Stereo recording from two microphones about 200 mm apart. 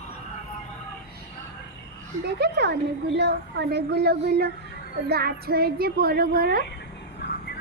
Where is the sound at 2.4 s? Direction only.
55° right (ahead or behind).